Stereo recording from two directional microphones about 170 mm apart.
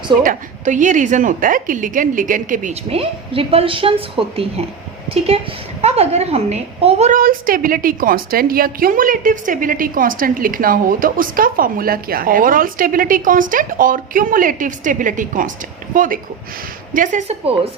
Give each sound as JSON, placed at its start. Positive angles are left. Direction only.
{"t": 0.2, "sound": "a woman's voice", "side_deg": -50}
{"t": 2.9, "sound": "a woman's voice", "side_deg": -35}
{"t": 7.2, "sound": "a woman's voice", "side_deg": -55}